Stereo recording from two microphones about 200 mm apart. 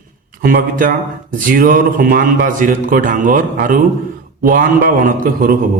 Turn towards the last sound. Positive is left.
turn(degrees=-45)  # may be behind; listen again after turning